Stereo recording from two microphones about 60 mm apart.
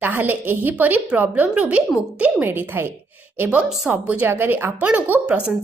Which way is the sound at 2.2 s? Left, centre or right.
Right.